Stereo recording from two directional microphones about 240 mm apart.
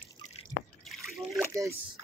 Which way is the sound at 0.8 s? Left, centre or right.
Centre.